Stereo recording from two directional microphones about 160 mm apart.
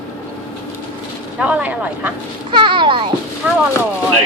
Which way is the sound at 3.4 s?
10° right (ahead or behind).